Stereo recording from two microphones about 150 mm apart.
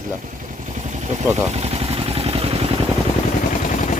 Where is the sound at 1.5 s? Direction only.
45° right (ahead or behind).